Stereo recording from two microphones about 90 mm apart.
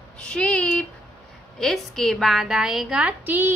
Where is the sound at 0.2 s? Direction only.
10° left (ahead or behind).